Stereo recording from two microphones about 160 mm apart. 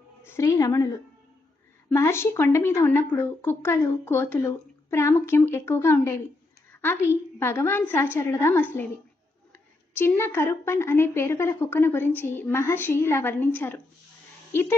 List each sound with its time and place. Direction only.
0.2 s a woman's voice: 15° left (ahead or behind)
1.9 s a woman's voice: 15° left (ahead or behind)
9.9 s a woman's voice: 15° left (ahead or behind)